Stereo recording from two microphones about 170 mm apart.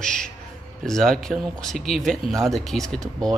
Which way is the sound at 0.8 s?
Centre (ahead or behind).